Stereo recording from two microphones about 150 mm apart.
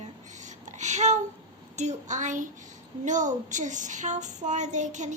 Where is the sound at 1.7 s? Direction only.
50° right (ahead or behind).